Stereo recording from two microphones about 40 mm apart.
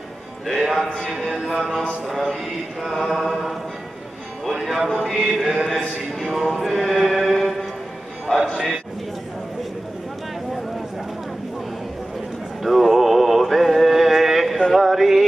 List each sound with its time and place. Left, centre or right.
0.5 s speech: centre
4.5 s music: centre
5.2 s chant: centre
5.7 s speech: centre
6.9 s mantra: centre
8.3 s a man's voice: centre
12.6 s music: centre